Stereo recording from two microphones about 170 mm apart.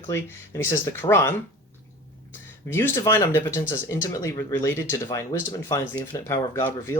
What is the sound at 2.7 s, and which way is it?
Speech, 15° left (ahead or behind).